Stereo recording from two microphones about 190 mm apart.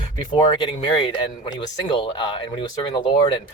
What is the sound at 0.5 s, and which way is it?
Speech, 25° left (ahead or behind).